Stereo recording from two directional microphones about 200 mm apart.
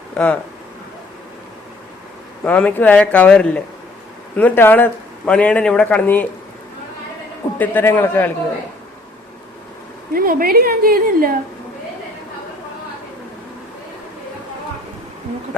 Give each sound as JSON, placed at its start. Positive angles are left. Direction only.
{"t": 0.1, "sound": "speech", "side_deg": 5}
{"t": 2.4, "sound": "a man's voice", "side_deg": 5}
{"t": 7.6, "sound": "a man's voice", "side_deg": 10}
{"t": 10.2, "sound": "a woman's voice", "side_deg": -45}